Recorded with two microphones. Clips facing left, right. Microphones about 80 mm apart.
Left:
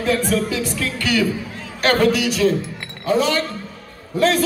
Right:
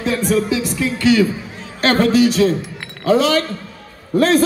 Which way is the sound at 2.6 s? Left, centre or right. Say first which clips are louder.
Right 4 dB; right.